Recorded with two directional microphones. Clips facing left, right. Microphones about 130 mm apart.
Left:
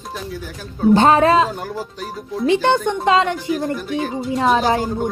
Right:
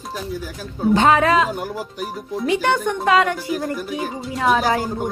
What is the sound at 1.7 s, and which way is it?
Speech, 10° right (ahead or behind).